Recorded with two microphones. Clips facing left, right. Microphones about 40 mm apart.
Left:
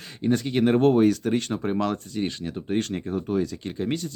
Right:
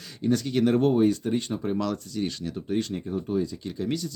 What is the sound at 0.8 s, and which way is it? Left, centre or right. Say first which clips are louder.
Speech: left 3 dB; left.